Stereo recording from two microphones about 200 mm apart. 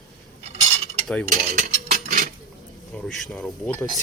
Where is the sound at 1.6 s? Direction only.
45° right (ahead or behind).